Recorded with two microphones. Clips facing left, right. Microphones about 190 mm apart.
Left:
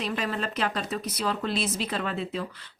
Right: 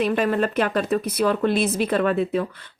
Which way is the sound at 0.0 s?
55° right (ahead or behind).